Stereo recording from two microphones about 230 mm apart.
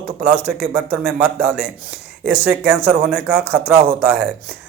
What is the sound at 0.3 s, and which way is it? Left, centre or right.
A man's voice, centre.